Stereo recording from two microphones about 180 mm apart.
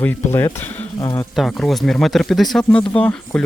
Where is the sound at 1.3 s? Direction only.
Centre (ahead or behind).